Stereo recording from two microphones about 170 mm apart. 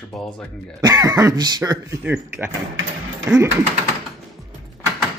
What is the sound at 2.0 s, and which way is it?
Speech, 10° right (ahead or behind).